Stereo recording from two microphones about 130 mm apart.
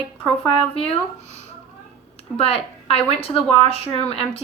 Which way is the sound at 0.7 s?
50° left (ahead or behind).